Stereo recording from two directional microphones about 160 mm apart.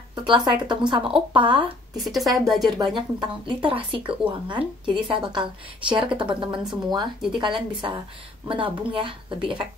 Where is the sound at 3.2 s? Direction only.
30° right (ahead or behind).